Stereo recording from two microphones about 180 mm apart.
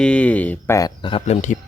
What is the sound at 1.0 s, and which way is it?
Speech, 30° left (ahead or behind).